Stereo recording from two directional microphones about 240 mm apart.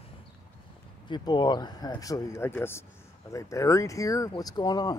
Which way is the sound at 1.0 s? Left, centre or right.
Centre.